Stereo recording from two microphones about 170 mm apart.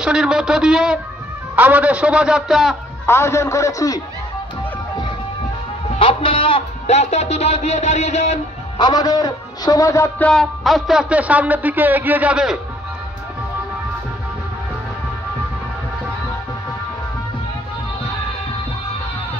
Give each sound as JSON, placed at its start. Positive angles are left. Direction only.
{"t": 0.0, "sound": "a man's voice", "side_deg": -5}
{"t": 3.1, "sound": "a man's voice", "side_deg": 15}
{"t": 5.9, "sound": "speech", "side_deg": 30}
{"t": 8.7, "sound": "a man's voice", "side_deg": 25}